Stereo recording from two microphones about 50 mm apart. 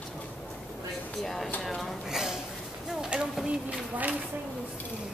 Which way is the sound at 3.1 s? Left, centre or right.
Right.